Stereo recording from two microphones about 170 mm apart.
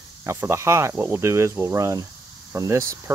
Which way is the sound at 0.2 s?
15° right (ahead or behind).